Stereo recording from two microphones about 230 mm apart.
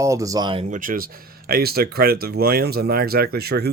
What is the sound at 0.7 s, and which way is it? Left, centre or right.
Speech, right.